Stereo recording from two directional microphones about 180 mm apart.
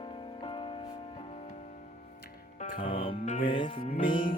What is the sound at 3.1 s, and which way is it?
Music, 45° left (ahead or behind).